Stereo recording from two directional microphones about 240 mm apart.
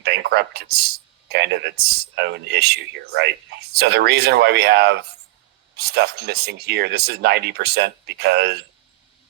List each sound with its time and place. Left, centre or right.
0.0 s speech: right